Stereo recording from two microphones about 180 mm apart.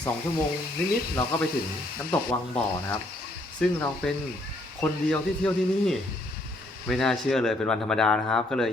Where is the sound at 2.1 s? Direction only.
5° left (ahead or behind).